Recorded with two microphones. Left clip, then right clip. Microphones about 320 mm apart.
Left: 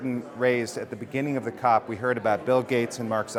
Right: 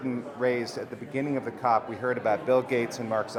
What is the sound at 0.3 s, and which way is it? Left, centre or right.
Speech, left.